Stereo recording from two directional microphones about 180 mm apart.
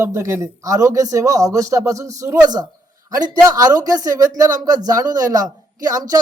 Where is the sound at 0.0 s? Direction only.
15° right (ahead or behind).